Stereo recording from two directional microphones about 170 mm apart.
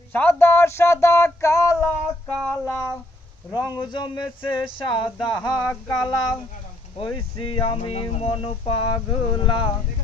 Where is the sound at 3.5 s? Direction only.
20° left (ahead or behind).